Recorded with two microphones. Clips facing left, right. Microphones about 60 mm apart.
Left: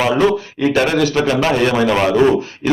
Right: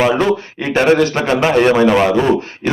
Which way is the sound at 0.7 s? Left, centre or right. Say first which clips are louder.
Right 4 dB; right.